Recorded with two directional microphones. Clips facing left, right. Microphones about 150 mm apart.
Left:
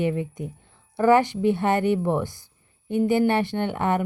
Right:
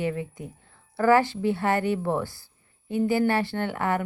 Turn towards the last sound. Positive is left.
turn(degrees=20)  # may be behind; listen again after turning